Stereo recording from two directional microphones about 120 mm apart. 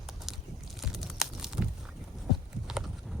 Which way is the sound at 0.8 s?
Centre (ahead or behind).